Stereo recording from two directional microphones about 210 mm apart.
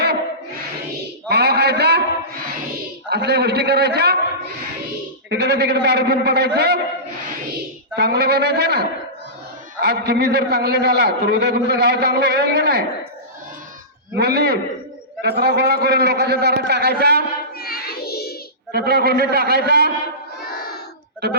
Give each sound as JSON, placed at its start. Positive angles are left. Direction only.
{"t": 1.3, "sound": "a sound", "side_deg": -50}
{"t": 3.1, "sound": "a man's voice", "side_deg": -50}
{"t": 5.3, "sound": "a man's voice", "side_deg": -50}
{"t": 7.9, "sound": "a man's voice", "side_deg": -50}
{"t": 14.2, "sound": "a man's voice", "side_deg": -50}
{"t": 17.6, "sound": "child singing", "side_deg": 45}
{"t": 18.7, "sound": "a man's voice", "side_deg": -50}
{"t": 20.4, "sound": "crowd", "side_deg": 45}